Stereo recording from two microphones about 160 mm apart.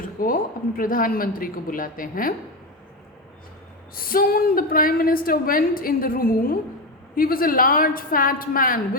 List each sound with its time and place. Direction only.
0.2 s a woman's voice: 60° left (ahead or behind)
3.9 s a woman's voice: 65° left (ahead or behind)